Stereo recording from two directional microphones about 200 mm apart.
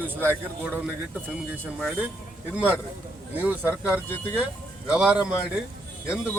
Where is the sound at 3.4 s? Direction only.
10° right (ahead or behind).